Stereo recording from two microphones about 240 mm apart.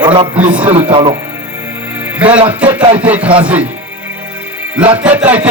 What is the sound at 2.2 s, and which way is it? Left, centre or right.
Speech, right.